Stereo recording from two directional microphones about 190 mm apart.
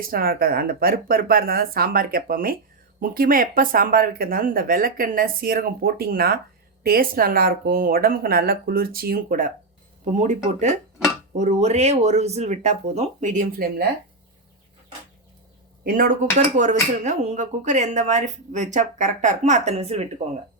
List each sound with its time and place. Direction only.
0.0 s speech: 50° right (ahead or behind)
15.8 s speech: 45° right (ahead or behind)